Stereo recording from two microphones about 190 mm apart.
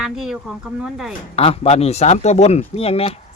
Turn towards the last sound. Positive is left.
turn(degrees=30)  # may be behind; listen again after turning